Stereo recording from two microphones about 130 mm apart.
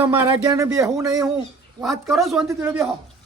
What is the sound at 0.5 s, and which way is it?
Speech, 25° right (ahead or behind).